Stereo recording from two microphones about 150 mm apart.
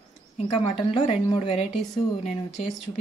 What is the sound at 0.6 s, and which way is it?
A woman's voice, 45° left (ahead or behind).